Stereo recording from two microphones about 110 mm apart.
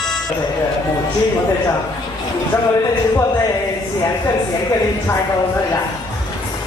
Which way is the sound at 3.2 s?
25° left (ahead or behind).